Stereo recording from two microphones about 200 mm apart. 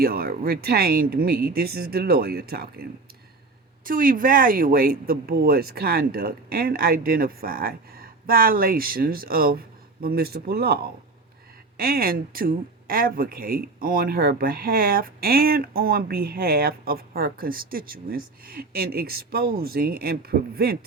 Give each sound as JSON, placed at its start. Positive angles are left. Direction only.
{"t": 0.0, "sound": "speech", "side_deg": -50}
{"t": 3.8, "sound": "speech", "side_deg": -45}